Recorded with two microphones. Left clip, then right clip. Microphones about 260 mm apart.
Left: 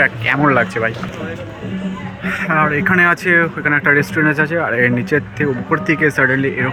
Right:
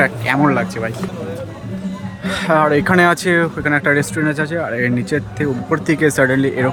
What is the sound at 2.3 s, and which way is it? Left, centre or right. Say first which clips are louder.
Speech: right 2 dB; right.